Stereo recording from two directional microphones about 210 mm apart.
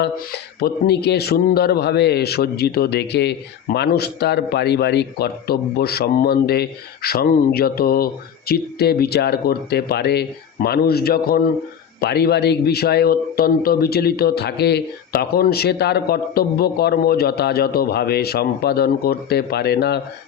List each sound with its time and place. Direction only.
0.0 s a man's voice: 50° left (ahead or behind)